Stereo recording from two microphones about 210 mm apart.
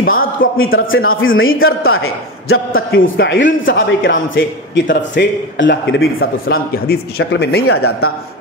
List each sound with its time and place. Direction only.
0.0 s a sound: 45° left (ahead or behind)
0.6 s a man's voice: 70° left (ahead or behind)
1.9 s a man's voice: 85° left; by 6.6 s 65° left (ahead or behind)
6.9 s a man's voice: 50° left (ahead or behind)
7.6 s speech: 90° left